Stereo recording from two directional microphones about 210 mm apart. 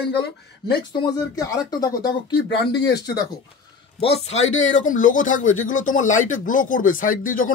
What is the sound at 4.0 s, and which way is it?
Speech, 30° left (ahead or behind).